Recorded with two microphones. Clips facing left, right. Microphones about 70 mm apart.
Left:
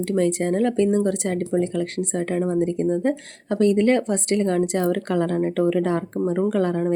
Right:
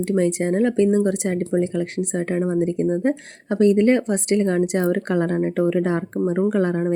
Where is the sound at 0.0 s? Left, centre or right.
Centre.